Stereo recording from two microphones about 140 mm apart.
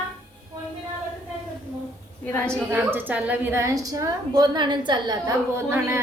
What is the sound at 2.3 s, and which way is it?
Speech, 5° left (ahead or behind).